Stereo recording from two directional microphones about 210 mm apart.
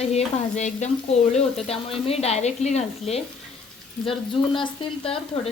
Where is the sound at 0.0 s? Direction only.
30° left (ahead or behind).